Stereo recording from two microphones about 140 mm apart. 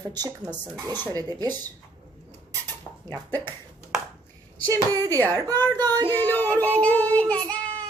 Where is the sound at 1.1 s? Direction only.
25° right (ahead or behind).